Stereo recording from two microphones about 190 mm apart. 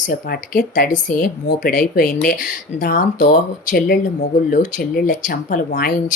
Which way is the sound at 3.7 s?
50° left (ahead or behind).